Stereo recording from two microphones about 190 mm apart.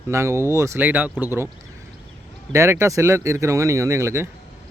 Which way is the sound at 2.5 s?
15° right (ahead or behind).